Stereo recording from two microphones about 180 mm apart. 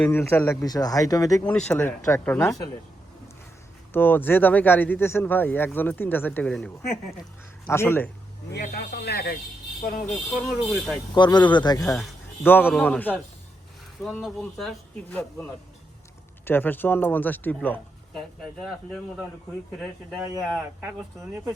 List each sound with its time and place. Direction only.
0.0 s speech: 10° left (ahead or behind)
1.5 s speech: 5° left (ahead or behind)
3.9 s speech: 10° left (ahead or behind)
7.7 s speech: 15° left (ahead or behind)
8.6 s speech: 60° left (ahead or behind)
10.4 s speech: centre (ahead or behind)
11.1 s speech: 25° left (ahead or behind)
11.9 s speech: 10° left (ahead or behind)
16.5 s speech: 10° left (ahead or behind)
19.8 s speech: centre (ahead or behind)